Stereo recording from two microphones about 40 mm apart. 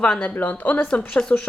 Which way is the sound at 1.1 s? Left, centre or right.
Left.